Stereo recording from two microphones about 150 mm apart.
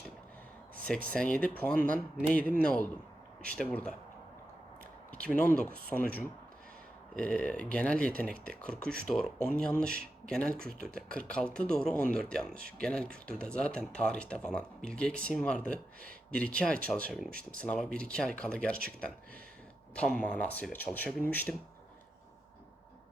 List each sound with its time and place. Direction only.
0.9 s speech: 5° left (ahead or behind)
5.1 s speech: 10° left (ahead or behind)
7.2 s speech: 10° left (ahead or behind)